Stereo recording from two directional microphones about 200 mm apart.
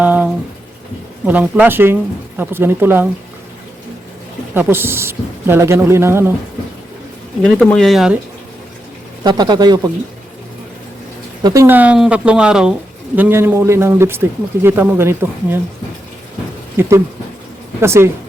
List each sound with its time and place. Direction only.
0.0 s a sound: 10° right (ahead or behind)
1.2 s speech: 10° right (ahead or behind)
4.5 s speech: 10° right (ahead or behind)
7.4 s speech: 5° left (ahead or behind)
9.2 s speech: 20° right (ahead or behind)
11.4 s speech: 15° right (ahead or behind)
16.8 s speech: 10° right (ahead or behind)